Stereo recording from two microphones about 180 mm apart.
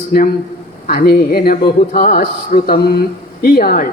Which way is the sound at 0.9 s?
60° left (ahead or behind).